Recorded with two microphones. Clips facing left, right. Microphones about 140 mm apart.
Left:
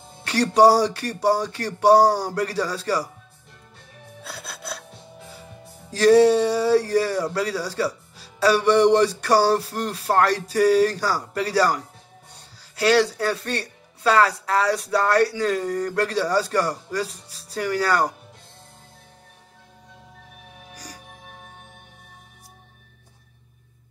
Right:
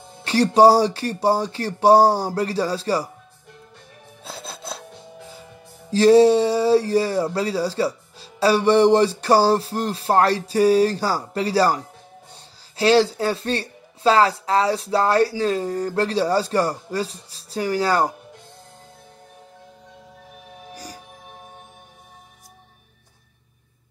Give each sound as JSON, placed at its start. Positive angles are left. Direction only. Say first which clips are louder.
{"t": 0.2, "sound": "speech", "louder": "right 2 dB", "side_deg": -25}
{"t": 4.2, "sound": "music", "louder": "right 2 dB", "side_deg": -25}
{"t": 5.9, "sound": "speech", "louder": "right 2 dB", "side_deg": -25}